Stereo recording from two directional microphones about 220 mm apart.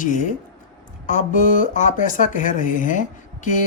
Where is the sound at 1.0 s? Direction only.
35° left (ahead or behind).